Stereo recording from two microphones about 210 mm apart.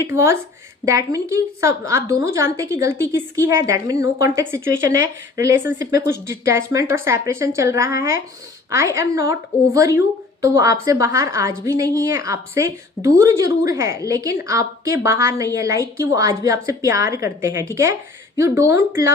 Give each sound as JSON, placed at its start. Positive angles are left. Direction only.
{"t": 0.0, "sound": "a woman's voice", "side_deg": -10}